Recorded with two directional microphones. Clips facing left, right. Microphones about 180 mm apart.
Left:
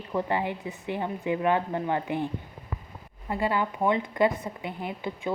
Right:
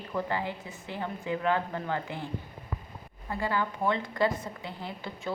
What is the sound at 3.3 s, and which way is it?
A woman's voice, 20° left (ahead or behind).